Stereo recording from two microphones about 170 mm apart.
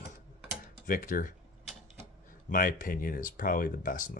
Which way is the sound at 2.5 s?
55° left (ahead or behind).